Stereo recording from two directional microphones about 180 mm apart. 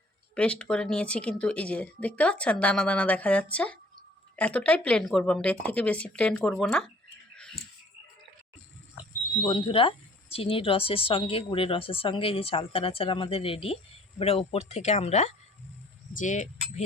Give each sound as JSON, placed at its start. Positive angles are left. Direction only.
{"t": 0.3, "sound": "speech", "side_deg": 5}
{"t": 9.4, "sound": "speech", "side_deg": 25}